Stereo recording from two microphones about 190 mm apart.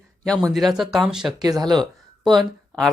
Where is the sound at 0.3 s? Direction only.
Centre (ahead or behind).